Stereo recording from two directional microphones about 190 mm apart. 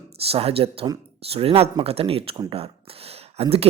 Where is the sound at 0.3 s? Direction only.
30° right (ahead or behind).